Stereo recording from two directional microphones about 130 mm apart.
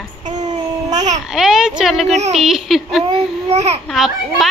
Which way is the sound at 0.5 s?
65° right (ahead or behind).